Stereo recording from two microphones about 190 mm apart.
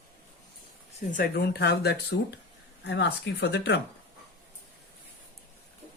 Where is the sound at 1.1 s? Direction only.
50° left (ahead or behind).